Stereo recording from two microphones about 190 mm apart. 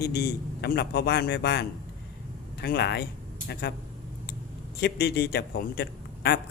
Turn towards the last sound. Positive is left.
turn(degrees=60)  # may be behind; listen again after turning